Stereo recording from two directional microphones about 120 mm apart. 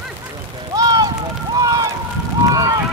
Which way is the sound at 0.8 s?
30° right (ahead or behind).